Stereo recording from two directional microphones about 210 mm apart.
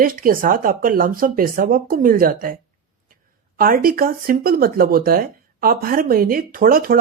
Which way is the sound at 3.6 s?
45° right (ahead or behind).